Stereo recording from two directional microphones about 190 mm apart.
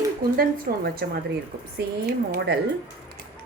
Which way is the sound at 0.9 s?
55° right (ahead or behind).